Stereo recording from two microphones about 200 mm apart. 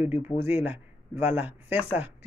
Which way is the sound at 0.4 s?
10° right (ahead or behind).